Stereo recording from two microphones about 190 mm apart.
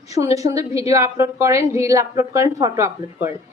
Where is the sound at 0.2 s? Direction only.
15° right (ahead or behind).